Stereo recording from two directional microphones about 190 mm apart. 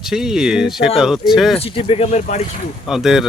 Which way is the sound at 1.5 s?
30° left (ahead or behind).